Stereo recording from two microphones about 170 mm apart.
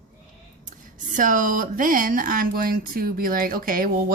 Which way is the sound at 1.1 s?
50° right (ahead or behind).